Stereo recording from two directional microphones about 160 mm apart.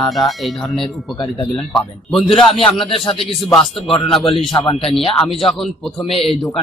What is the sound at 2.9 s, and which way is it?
Speech, 30° left (ahead or behind).